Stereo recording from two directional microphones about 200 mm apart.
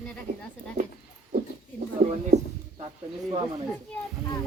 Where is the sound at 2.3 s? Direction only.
35° right (ahead or behind).